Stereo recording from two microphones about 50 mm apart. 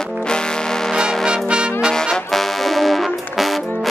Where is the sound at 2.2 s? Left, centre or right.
Centre.